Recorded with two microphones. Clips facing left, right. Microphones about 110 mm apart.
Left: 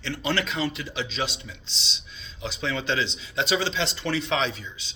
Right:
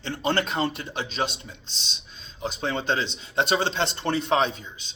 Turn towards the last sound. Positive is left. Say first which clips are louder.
# right 1 dB
turn(degrees=-50)  # may be behind; listen again after turning